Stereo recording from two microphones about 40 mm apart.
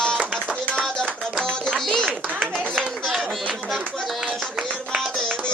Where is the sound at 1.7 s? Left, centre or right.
Centre.